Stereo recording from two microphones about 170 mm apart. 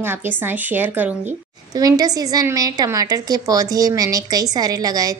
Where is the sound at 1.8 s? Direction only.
20° right (ahead or behind).